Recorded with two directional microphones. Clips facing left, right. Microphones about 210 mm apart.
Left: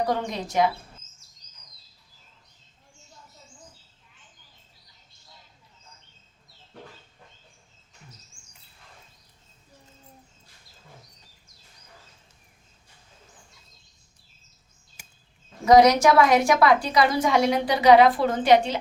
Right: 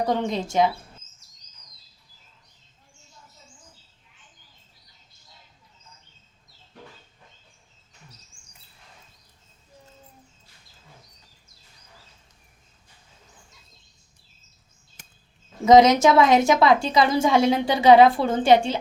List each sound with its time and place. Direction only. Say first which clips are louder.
0.0 s a woman's voice: right 3 dB; 20° right (ahead or behind)
15.6 s a woman's voice: right 2 dB; 20° right (ahead or behind)